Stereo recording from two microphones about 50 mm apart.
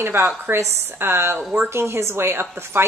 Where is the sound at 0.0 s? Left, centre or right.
Right.